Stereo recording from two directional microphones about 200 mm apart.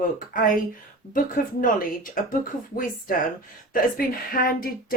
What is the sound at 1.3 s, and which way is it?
A woman's voice, 45° left (ahead or behind).